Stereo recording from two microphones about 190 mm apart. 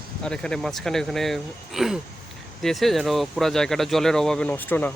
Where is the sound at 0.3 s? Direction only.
5° left (ahead or behind).